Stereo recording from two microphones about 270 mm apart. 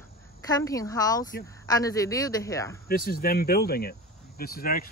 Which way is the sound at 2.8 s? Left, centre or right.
Left.